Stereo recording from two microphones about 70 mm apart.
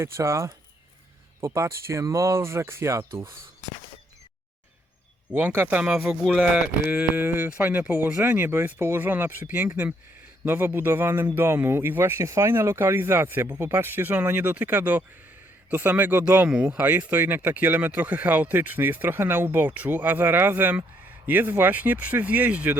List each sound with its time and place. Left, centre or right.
0.0 s speech: right
5.3 s speech: right
5.9 s speech: centre
6.9 s speech: right
17.1 s speech: right